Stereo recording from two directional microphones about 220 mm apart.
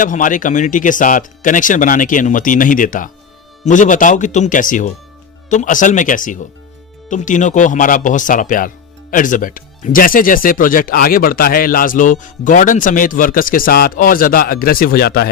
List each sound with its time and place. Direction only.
0.0 s speech: 35° left (ahead or behind)